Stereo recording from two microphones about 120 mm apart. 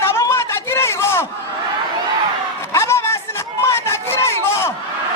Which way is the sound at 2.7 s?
20° left (ahead or behind).